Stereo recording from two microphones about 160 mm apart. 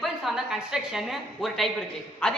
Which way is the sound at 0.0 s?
Centre (ahead or behind).